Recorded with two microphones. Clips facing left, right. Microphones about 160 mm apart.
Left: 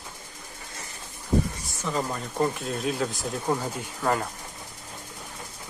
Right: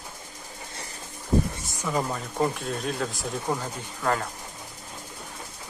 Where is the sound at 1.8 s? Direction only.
5° right (ahead or behind).